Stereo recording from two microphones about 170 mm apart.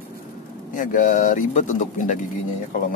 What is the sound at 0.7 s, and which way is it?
Speech, 50° left (ahead or behind).